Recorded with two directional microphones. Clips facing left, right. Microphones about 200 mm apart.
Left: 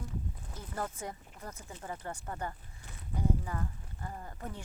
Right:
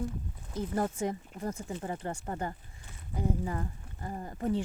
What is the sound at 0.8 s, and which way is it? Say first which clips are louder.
Speech: right 7 dB; 25° right (ahead or behind).